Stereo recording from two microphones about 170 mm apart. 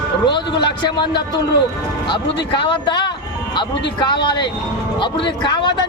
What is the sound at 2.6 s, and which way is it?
Speech, 30° left (ahead or behind).